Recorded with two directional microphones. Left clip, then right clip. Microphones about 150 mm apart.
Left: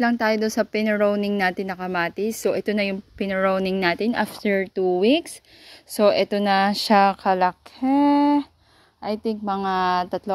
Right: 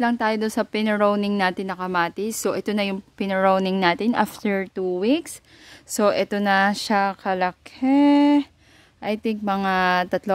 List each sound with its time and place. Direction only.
0.0 s speech: 10° right (ahead or behind)
5.9 s speech: 15° right (ahead or behind)
6.9 s speech: 5° left (ahead or behind)
7.2 s speech: 15° right (ahead or behind); by 10.3 s 40° right (ahead or behind)